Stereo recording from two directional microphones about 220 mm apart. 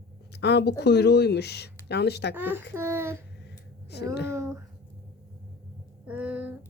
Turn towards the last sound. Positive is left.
turn(degrees=-5)  # may be behind; listen again after turning